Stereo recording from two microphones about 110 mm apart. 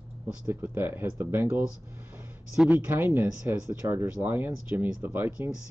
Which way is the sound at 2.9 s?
20° right (ahead or behind).